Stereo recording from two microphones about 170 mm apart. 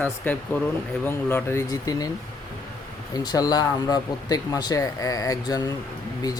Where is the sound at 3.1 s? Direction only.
20° left (ahead or behind).